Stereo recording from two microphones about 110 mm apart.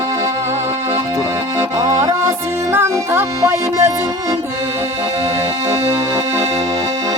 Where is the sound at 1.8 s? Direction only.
35° right (ahead or behind).